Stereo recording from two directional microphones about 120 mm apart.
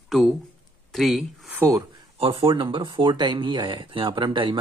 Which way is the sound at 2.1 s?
50° right (ahead or behind).